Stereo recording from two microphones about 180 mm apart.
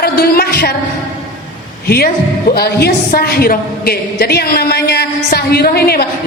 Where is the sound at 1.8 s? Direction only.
60° left (ahead or behind).